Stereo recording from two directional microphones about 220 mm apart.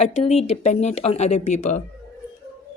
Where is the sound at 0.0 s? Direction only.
30° left (ahead or behind).